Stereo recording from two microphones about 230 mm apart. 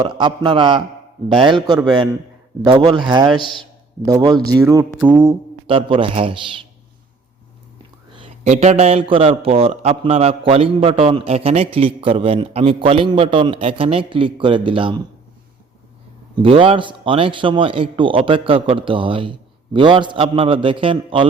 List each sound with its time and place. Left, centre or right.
0.2 s a man's voice: centre
5.6 s a man's voice: right
8.1 s a man's voice: right
16.3 s a man's voice: right